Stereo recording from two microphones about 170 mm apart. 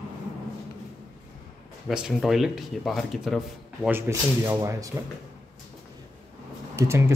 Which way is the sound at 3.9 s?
15° right (ahead or behind).